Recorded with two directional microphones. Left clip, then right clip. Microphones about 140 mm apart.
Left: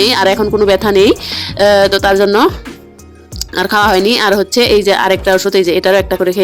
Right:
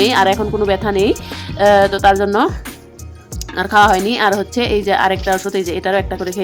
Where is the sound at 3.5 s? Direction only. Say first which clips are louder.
Left 1 dB; 35° left (ahead or behind).